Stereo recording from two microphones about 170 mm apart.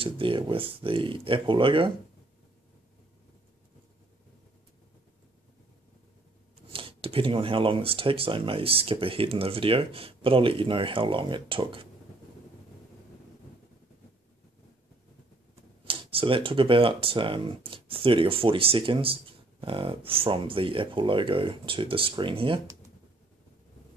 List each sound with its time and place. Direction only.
0.0 s speech: 30° right (ahead or behind)
6.7 s speech: 30° right (ahead or behind)
15.8 s speech: 30° right (ahead or behind)